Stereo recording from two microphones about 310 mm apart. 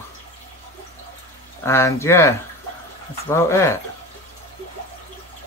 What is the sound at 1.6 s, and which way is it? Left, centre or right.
Speech, centre.